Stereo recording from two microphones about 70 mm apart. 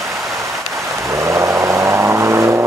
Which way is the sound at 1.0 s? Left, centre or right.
Right.